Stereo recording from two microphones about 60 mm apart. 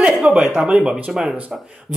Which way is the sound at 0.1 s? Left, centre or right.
Centre.